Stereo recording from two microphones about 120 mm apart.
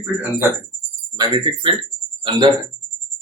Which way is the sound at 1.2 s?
40° right (ahead or behind).